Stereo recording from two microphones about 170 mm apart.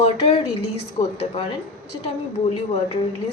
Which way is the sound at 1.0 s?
40° left (ahead or behind).